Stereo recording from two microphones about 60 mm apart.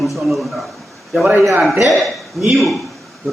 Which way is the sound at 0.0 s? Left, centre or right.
Centre.